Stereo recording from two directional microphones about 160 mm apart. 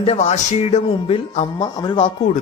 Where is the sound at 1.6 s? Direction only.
25° left (ahead or behind).